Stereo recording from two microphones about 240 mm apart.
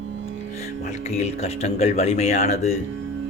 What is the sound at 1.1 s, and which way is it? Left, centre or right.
Speech, left.